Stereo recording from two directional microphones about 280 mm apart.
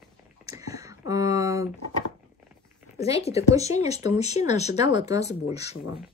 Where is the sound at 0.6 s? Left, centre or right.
Centre.